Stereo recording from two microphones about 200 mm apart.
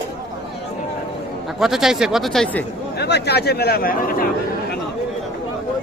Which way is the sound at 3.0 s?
55° left (ahead or behind).